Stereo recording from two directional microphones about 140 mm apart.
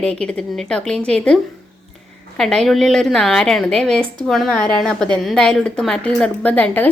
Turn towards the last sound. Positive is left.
turn(degrees=10)  # may be behind; listen again after turning